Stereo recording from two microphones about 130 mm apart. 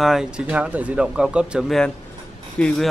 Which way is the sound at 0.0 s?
5° right (ahead or behind).